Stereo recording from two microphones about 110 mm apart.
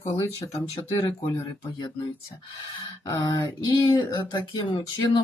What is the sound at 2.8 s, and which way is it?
Speech, 35° left (ahead or behind).